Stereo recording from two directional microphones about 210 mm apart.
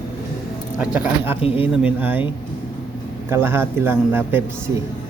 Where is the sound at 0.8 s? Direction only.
5° right (ahead or behind).